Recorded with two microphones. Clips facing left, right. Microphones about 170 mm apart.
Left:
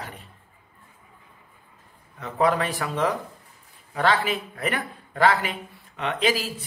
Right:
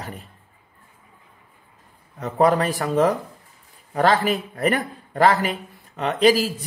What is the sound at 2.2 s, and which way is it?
A man's voice, 40° right (ahead or behind).